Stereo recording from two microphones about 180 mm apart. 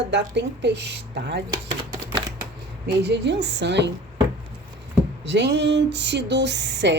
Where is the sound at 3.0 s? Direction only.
75° right (ahead or behind).